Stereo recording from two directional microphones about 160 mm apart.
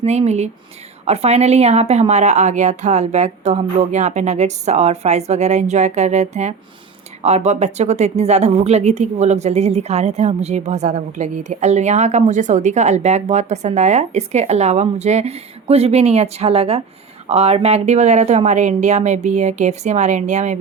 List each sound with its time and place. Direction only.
0.0 s speech: 45° right (ahead or behind)